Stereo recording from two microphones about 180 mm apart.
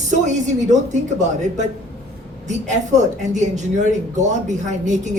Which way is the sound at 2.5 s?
40° right (ahead or behind).